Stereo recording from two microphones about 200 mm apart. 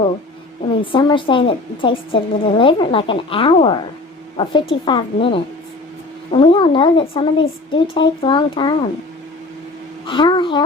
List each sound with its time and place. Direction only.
0.6 s a woman's voice: 25° left (ahead or behind)
10.1 s a woman's voice: 25° left (ahead or behind)